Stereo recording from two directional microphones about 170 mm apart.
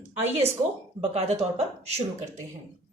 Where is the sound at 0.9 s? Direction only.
40° right (ahead or behind).